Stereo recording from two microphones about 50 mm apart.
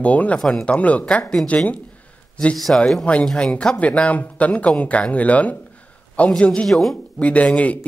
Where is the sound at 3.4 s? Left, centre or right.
Left.